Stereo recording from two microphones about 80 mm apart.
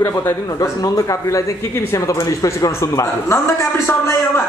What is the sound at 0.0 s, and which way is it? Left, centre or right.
Speech, left.